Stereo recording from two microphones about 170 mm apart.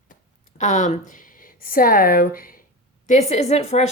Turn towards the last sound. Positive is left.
turn(degrees=40)  # may be behind; listen again after turning